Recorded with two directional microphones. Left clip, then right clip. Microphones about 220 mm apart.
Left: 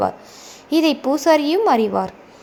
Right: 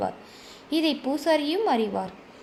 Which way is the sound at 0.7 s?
30° left (ahead or behind).